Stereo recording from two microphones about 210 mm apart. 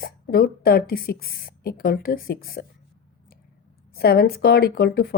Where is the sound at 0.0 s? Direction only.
45° left (ahead or behind).